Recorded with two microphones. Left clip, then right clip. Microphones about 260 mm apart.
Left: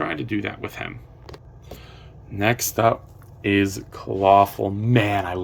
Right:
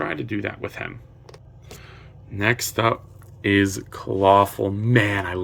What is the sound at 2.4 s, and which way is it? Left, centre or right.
Speech, centre.